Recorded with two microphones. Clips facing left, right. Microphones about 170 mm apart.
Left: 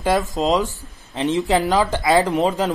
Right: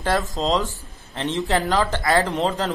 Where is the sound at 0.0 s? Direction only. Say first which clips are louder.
Left 3 dB; 15° left (ahead or behind).